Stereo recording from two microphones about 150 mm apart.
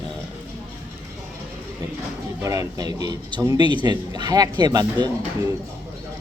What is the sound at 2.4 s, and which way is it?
Speech, 25° right (ahead or behind).